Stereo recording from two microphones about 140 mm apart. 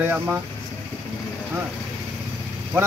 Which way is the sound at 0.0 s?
15° right (ahead or behind).